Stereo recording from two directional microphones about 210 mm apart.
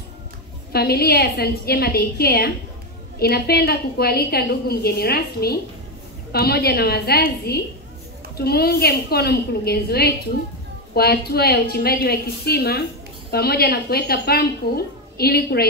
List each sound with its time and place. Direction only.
0.7 s a woman's voice: 50° left (ahead or behind)